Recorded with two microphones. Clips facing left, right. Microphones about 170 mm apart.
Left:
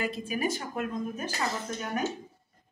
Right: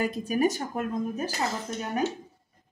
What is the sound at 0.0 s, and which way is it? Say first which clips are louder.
A woman's voice: right 5 dB; 45° right (ahead or behind).